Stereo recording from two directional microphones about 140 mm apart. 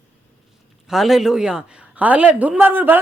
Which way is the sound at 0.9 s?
Centre (ahead or behind).